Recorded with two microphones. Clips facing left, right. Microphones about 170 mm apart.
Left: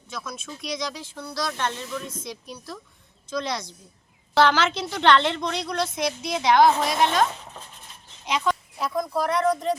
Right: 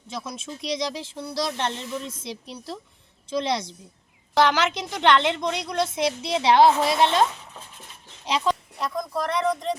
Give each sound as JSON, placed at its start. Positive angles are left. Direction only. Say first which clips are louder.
{"t": 0.1, "sound": "a woman's voice", "louder": "right 2 dB", "side_deg": -30}
{"t": 8.8, "sound": "speech", "louder": "left 2 dB", "side_deg": 5}